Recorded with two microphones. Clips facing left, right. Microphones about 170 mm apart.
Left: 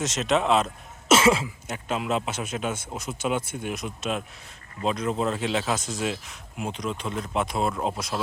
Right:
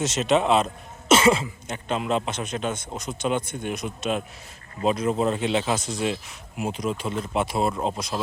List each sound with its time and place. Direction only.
0.0 s speech: centre (ahead or behind)